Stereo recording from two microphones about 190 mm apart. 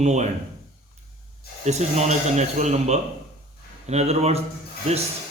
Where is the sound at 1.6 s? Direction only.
35° right (ahead or behind).